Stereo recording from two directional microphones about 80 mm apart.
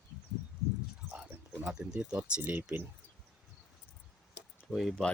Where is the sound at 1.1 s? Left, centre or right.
Centre.